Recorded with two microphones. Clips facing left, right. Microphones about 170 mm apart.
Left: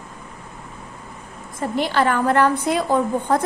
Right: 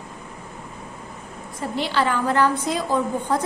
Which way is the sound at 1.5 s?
50° left (ahead or behind).